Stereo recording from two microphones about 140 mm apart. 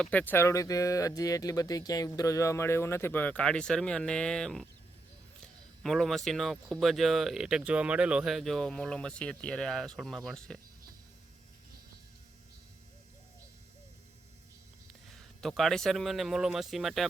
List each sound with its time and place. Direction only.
0.0 s speech: 10° left (ahead or behind)
5.8 s speech: centre (ahead or behind)
15.4 s speech: centre (ahead or behind)